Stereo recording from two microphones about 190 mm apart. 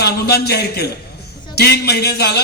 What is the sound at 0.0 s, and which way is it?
A man's voice, 55° left (ahead or behind).